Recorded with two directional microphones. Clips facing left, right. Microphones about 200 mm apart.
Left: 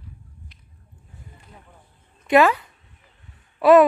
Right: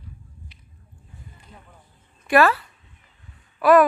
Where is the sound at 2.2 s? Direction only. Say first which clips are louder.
Left 2 dB; 20° left (ahead or behind).